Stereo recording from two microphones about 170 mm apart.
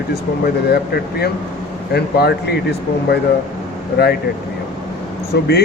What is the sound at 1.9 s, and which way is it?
Speech, 70° left (ahead or behind).